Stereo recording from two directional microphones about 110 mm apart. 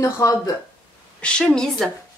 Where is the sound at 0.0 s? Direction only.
30° left (ahead or behind).